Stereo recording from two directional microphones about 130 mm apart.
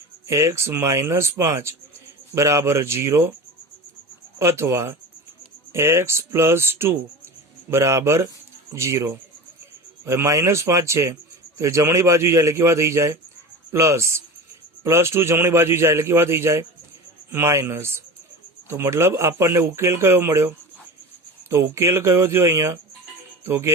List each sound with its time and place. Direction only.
0.3 s speech: 20° right (ahead or behind)
4.4 s speech: 20° right (ahead or behind)
21.5 s speech: 20° right (ahead or behind)